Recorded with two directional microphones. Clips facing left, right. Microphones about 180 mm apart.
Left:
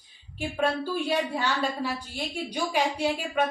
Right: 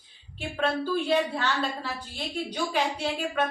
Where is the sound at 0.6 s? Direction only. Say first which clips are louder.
Right 1 dB; 10° left (ahead or behind).